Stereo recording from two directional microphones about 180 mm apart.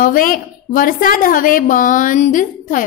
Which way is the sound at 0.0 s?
50° left (ahead or behind).